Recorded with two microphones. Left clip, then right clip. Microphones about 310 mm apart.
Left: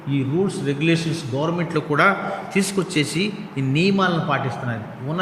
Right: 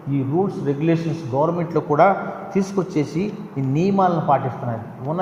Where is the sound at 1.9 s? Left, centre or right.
Centre.